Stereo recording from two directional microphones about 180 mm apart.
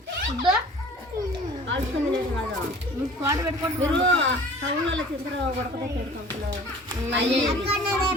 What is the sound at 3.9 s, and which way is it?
Speech, 90° right.